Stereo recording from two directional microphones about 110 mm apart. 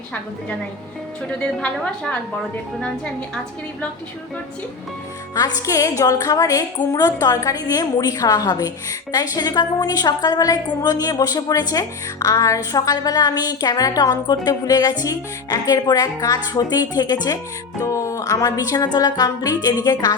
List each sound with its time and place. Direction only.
1.4 s a woman's voice: 10° left (ahead or behind)
5.3 s a woman's voice: 35° left (ahead or behind)
17.7 s a woman's voice: 25° left (ahead or behind)